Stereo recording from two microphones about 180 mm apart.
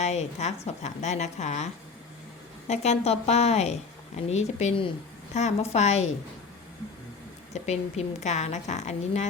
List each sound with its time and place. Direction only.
0.0 s a woman's voice: 35° left (ahead or behind)
7.5 s a woman's voice: 40° left (ahead or behind)